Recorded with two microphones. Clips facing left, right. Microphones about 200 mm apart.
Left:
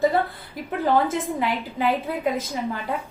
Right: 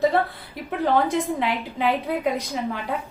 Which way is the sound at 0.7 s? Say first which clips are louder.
Even; centre (ahead or behind).